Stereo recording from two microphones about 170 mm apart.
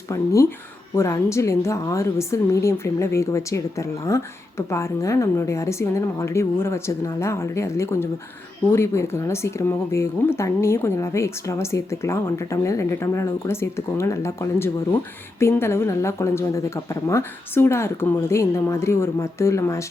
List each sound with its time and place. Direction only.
0.1 s a woman's voice: 20° left (ahead or behind)